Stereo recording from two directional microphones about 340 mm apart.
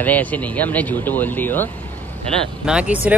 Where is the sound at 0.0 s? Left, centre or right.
Centre.